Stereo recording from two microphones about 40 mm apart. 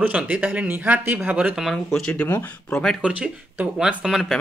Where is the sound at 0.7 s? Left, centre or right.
Right.